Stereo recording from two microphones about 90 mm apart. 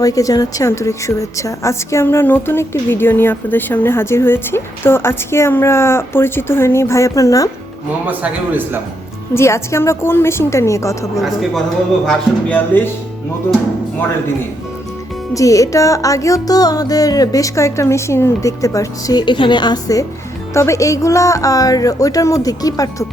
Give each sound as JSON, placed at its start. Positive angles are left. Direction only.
{"t": 0.0, "sound": "a woman's voice", "side_deg": 40}
{"t": 8.0, "sound": "a man's voice", "side_deg": -20}
{"t": 9.3, "sound": "music", "side_deg": 30}
{"t": 12.0, "sound": "a woman's voice", "side_deg": 20}
{"t": 15.3, "sound": "music", "side_deg": 40}
{"t": 19.2, "sound": "a woman's voice", "side_deg": 60}
{"t": 20.5, "sound": "music", "side_deg": 35}